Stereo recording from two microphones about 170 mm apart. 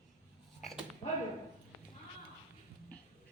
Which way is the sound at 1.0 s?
40° left (ahead or behind).